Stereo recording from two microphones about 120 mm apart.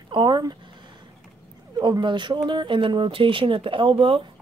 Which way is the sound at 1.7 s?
35° right (ahead or behind).